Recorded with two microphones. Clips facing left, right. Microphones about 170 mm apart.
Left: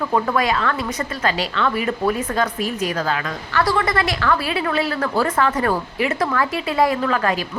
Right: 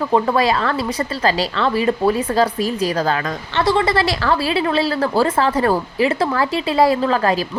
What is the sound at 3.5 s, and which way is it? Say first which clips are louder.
A woman's voice: right 3 dB; 25° right (ahead or behind).